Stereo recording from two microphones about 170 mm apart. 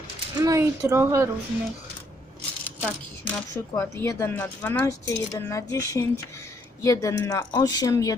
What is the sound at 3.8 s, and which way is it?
Speech, 15° left (ahead or behind).